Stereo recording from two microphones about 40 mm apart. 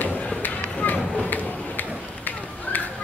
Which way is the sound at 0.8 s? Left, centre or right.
Left.